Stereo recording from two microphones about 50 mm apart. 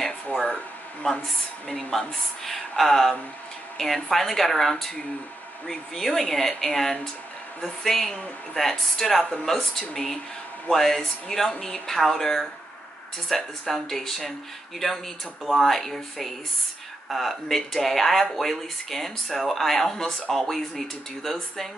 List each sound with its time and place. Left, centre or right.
1.0 s speech: centre
15.6 s speech: centre